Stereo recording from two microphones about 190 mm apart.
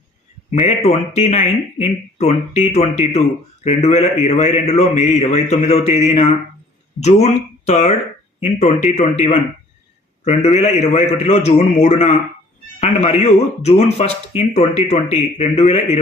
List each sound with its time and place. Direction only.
0.6 s speech: 35° left (ahead or behind)